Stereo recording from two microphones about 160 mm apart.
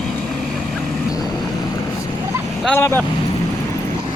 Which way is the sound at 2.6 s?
15° left (ahead or behind).